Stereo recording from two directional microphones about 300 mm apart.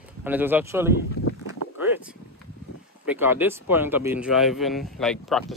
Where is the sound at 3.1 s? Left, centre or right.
Centre.